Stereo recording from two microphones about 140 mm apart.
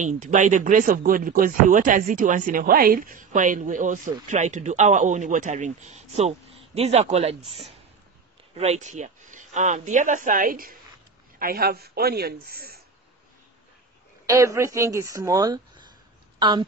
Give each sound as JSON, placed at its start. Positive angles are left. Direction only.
{"t": 0.0, "sound": "a man's voice", "side_deg": -60}
{"t": 14.2, "sound": "speech", "side_deg": -20}